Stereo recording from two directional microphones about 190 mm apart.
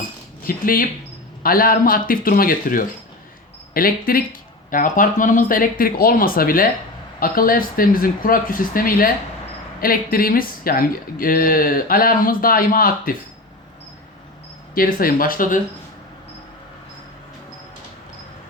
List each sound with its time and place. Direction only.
0.4 s speech: 50° left (ahead or behind)
14.8 s speech: 50° left (ahead or behind)